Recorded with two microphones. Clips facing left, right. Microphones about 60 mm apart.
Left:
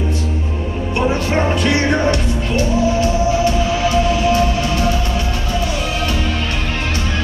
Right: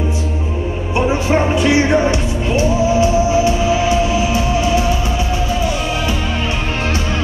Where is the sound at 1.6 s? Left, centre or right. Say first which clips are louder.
Right 3 dB; centre.